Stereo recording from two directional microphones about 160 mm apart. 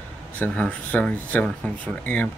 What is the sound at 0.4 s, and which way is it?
Speech, 10° left (ahead or behind).